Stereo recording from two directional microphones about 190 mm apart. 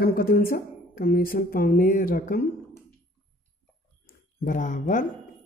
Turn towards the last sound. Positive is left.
turn(degrees=45)  # may be behind; listen again after turning